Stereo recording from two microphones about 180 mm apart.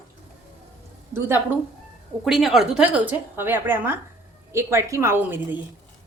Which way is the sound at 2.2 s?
Centre (ahead or behind).